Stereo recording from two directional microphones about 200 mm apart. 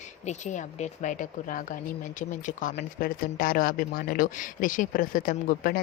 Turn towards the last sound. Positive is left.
turn(degrees=45)  # may be behind; listen again after turning